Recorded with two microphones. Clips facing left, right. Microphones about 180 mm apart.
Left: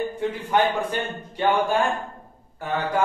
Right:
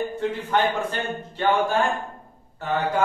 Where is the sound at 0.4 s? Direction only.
10° left (ahead or behind).